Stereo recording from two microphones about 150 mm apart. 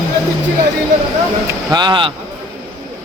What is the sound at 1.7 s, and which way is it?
Speech, 30° right (ahead or behind).